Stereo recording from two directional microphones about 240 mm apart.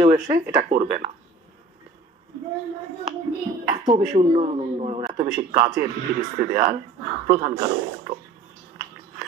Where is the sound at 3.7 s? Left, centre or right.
Centre.